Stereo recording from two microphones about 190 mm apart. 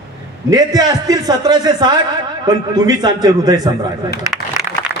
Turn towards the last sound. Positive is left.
turn(degrees=-20)  # may be behind; listen again after turning